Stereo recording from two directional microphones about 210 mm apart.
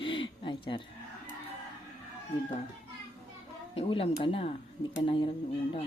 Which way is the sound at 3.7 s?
25° left (ahead or behind).